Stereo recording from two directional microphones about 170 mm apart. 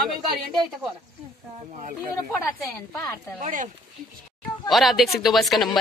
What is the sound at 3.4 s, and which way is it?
Speech, 50° right (ahead or behind).